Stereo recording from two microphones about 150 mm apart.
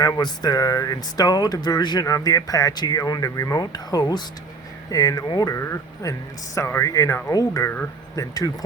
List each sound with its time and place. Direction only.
0.0 s speech: 25° left (ahead or behind)